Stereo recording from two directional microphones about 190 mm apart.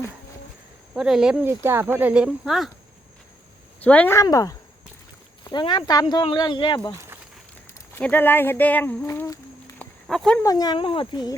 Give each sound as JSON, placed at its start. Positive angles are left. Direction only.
{"t": 0.9, "sound": "speech", "side_deg": -5}
{"t": 3.8, "sound": "speech", "side_deg": 10}
{"t": 6.9, "sound": "a sound", "side_deg": -15}
{"t": 7.7, "sound": "speech", "side_deg": 10}
{"t": 10.1, "sound": "speech", "side_deg": 5}
{"t": 10.4, "sound": "speech", "side_deg": 20}